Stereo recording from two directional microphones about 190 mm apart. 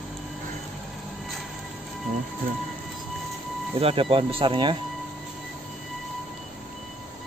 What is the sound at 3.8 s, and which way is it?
Speech, 30° right (ahead or behind).